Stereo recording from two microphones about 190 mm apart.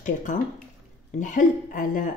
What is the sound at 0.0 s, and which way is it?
Speech, 40° left (ahead or behind).